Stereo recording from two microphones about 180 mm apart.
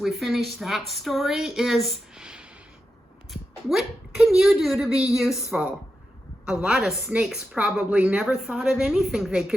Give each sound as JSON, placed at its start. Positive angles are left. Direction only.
{"t": 0.0, "sound": "a woman's voice", "side_deg": 0}
{"t": 3.7, "sound": "a woman's voice", "side_deg": -5}